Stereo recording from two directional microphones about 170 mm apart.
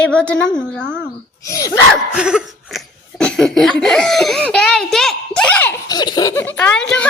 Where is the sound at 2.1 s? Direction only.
5° right (ahead or behind).